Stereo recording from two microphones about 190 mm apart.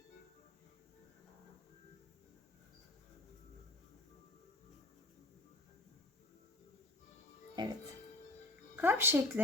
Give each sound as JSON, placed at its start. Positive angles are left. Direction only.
{"t": 7.5, "sound": "music", "side_deg": -25}
{"t": 8.7, "sound": "a woman's voice", "side_deg": -10}